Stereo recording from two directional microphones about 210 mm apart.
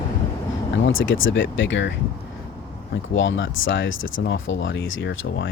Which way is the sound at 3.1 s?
60° left (ahead or behind).